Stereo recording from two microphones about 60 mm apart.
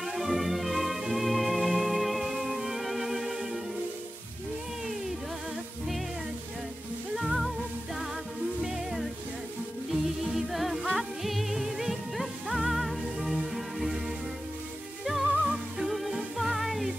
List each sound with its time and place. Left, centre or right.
0.0 s music: centre
7.2 s music: centre
10.3 s music: centre
15.0 s music: centre